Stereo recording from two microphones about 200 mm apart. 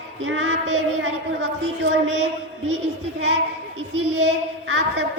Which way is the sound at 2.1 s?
35° right (ahead or behind).